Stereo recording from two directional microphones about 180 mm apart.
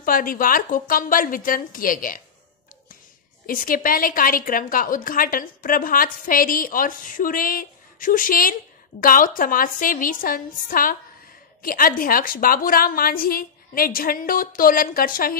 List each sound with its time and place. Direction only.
0.0 s a woman's voice: 50° left (ahead or behind)
3.4 s a woman's voice: 50° left (ahead or behind)